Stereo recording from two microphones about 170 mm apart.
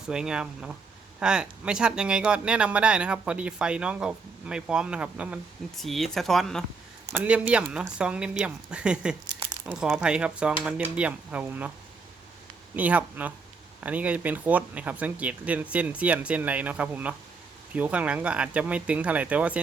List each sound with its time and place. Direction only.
0.0 s speech: 5° right (ahead or behind)
7.1 s speech: 10° right (ahead or behind)
9.4 s crumpling: 20° right (ahead or behind)
9.7 s speech: 5° right (ahead or behind)
12.7 s speech: 10° right (ahead or behind)